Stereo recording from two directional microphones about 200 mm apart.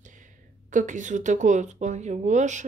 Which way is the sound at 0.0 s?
40° right (ahead or behind).